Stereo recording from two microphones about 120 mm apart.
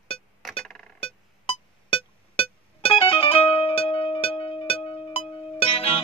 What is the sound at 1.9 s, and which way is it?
Music, 50° left (ahead or behind).